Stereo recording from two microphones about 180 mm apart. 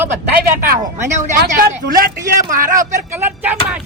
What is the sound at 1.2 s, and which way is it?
Speech, 50° right (ahead or behind).